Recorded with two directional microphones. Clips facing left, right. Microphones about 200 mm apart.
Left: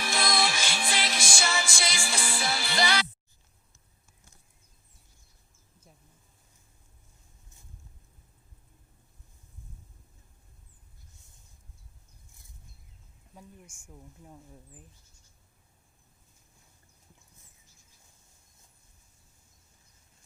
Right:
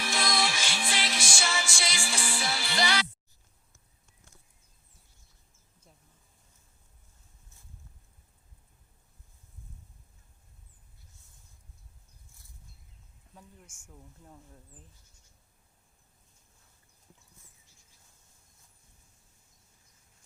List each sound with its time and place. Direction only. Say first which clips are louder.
0.0 s music: left 2 dB; 50° left (ahead or behind)
13.9 s speech: left 3 dB; 10° left (ahead or behind)